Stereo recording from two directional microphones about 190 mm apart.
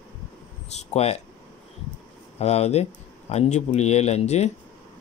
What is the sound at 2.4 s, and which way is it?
Speech, 35° left (ahead or behind).